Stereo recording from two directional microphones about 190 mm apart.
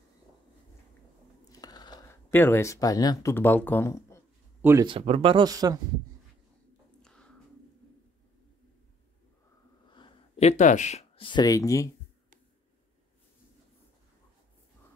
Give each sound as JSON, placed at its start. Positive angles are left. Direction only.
{"t": 1.5, "sound": "speech", "side_deg": 20}
{"t": 4.6, "sound": "speech", "side_deg": -10}
{"t": 4.8, "sound": "speech", "side_deg": -30}
{"t": 7.0, "sound": "a sound", "side_deg": 5}
{"t": 9.8, "sound": "speech", "side_deg": 25}